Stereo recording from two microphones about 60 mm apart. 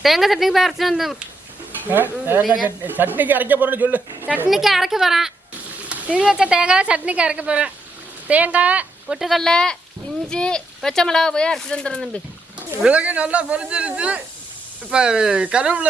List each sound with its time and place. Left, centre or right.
0.0 s speech: centre
1.9 s speech: right
4.4 s speech: centre
5.9 s speech: centre
9.0 s speech: centre
9.4 s speech: centre
12.9 s speech: right